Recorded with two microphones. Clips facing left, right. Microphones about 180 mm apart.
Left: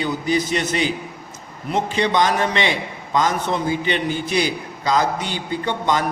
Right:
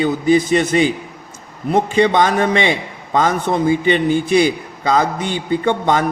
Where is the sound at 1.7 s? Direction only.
55° right (ahead or behind).